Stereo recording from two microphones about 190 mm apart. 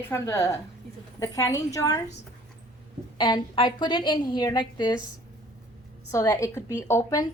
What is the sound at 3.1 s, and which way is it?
A woman's voice, 25° left (ahead or behind).